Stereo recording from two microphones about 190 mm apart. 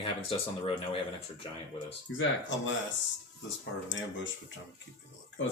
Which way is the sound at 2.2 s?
80° left.